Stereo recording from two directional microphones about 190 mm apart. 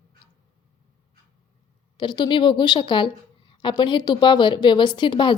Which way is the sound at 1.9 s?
25° left (ahead or behind).